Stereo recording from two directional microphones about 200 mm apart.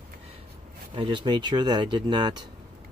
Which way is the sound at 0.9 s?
25° right (ahead or behind).